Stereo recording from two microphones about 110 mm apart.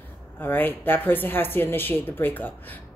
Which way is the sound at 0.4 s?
15° left (ahead or behind).